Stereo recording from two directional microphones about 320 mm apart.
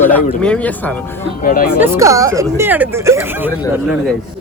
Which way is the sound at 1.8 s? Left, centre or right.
Centre.